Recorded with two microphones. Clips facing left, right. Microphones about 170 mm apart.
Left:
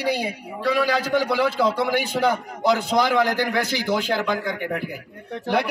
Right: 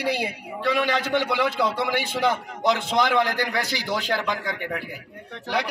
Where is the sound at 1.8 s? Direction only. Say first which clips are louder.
Left 3 dB; 45° left (ahead or behind).